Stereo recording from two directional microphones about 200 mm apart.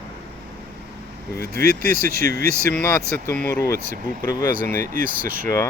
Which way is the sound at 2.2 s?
45° right (ahead or behind).